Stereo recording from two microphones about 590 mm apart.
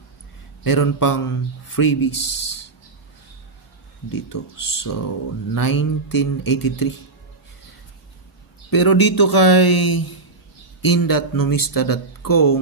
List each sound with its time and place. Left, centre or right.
0.7 s speech: left
2.1 s speech: centre
4.1 s speech: left
8.6 s speech: left